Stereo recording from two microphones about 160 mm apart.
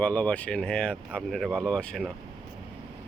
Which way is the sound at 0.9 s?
10° right (ahead or behind).